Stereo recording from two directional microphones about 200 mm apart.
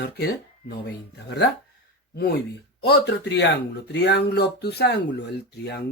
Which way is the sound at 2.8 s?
55° left (ahead or behind).